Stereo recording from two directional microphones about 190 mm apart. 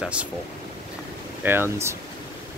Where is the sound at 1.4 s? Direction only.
10° right (ahead or behind).